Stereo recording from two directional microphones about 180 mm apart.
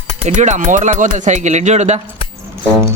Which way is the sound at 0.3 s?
45° right (ahead or behind).